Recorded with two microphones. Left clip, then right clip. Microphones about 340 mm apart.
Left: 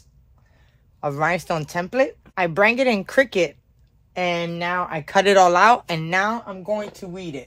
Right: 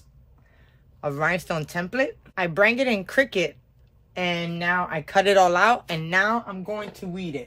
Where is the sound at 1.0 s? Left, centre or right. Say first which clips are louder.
Left 3 dB; centre.